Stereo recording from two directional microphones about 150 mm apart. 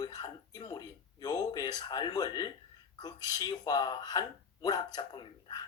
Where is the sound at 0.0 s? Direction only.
25° left (ahead or behind).